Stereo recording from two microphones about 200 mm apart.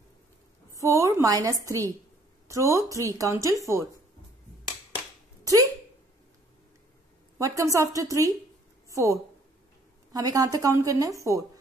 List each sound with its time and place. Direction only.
0.7 s a woman's voice: 15° right (ahead or behind)
4.9 s a sound: 15° right (ahead or behind)
7.3 s a woman's voice: 15° right (ahead or behind)